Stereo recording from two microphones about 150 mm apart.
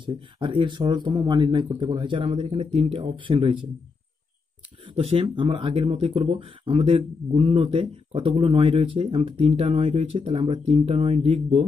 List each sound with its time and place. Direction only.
0.0 s speech: 30° right (ahead or behind)
4.9 s speech: 40° right (ahead or behind)